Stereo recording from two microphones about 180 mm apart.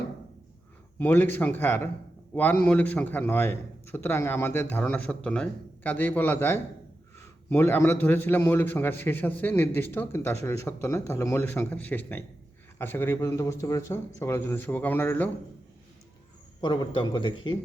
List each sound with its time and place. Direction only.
0.9 s a man's voice: 10° left (ahead or behind)
16.6 s speech: 25° left (ahead or behind)